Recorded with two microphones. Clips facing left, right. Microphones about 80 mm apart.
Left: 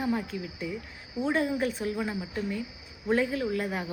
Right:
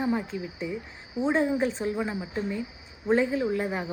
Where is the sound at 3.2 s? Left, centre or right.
Right.